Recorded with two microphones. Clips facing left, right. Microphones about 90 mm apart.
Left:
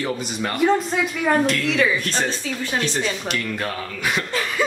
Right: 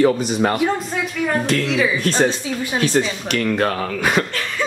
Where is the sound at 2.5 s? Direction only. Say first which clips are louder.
Right 4 dB; 20° right (ahead or behind).